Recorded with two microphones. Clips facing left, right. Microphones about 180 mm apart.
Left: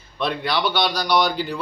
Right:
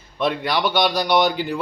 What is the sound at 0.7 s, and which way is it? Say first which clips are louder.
Speech: right 2 dB; 15° right (ahead or behind).